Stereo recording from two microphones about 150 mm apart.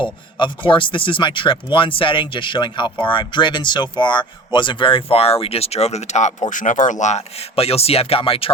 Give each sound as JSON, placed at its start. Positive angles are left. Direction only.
{"t": 0.3, "sound": "speech", "side_deg": 35}